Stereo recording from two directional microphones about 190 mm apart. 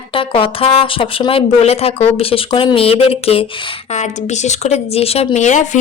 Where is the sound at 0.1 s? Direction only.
30° left (ahead or behind).